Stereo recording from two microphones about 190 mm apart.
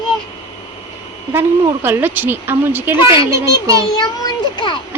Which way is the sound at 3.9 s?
20° left (ahead or behind).